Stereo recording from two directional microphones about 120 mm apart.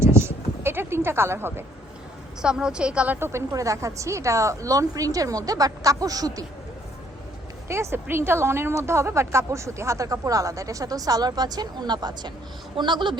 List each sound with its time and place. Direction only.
0.0 s a sound: 20° right (ahead or behind)
2.4 s a woman's voice: 5° right (ahead or behind)
3.2 s a woman's voice: 20° right (ahead or behind)
7.7 s a woman's voice: 20° right (ahead or behind); by 13.1 s 40° right (ahead or behind)